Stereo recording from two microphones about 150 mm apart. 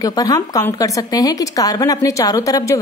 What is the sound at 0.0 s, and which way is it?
A woman's voice, 25° left (ahead or behind).